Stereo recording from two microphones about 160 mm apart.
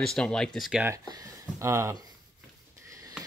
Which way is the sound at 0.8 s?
20° right (ahead or behind).